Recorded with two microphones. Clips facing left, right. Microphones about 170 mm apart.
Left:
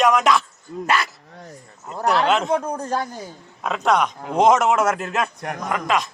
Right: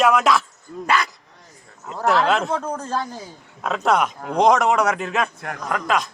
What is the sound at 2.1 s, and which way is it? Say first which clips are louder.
Speech: even; centre (ahead or behind).